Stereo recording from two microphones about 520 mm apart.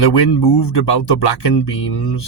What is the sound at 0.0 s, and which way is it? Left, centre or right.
Speech, left.